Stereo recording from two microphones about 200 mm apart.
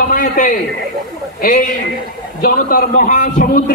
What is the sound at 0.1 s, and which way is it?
Speech, 40° left (ahead or behind).